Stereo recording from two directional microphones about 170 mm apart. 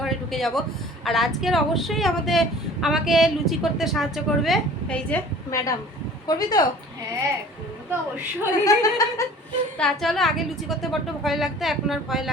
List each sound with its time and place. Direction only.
0.0 s a sound: centre (ahead or behind)
1.0 s speech: centre (ahead or behind)
5.5 s speech: 20° left (ahead or behind)
8.6 s speech: 20° left (ahead or behind)
9.7 s speech: 5° left (ahead or behind)